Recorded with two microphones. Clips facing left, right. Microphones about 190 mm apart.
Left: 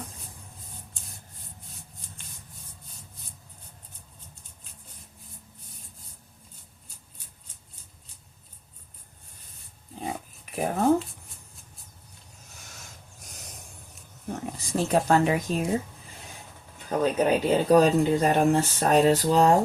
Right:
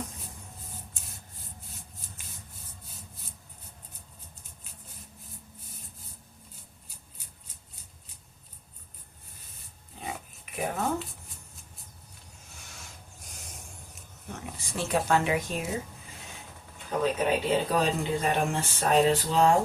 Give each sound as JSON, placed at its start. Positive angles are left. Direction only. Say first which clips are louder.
{"t": 10.0, "sound": "dog", "louder": "left 5 dB", "side_deg": 35}
{"t": 14.4, "sound": "speech", "louder": "left 6 dB", "side_deg": 40}
{"t": 17.0, "sound": "speech", "louder": "left 4 dB", "side_deg": 40}